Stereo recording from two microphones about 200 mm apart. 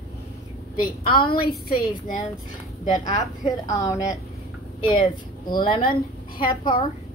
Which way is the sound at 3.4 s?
15° left (ahead or behind).